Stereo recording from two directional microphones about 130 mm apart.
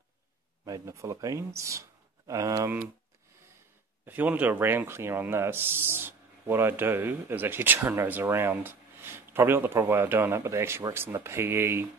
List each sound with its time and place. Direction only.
0.7 s speech: 25° right (ahead or behind)
4.0 s speech: 15° right (ahead or behind)